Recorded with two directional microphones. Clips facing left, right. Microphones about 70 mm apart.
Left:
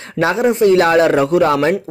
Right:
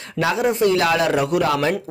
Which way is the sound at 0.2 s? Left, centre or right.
Left.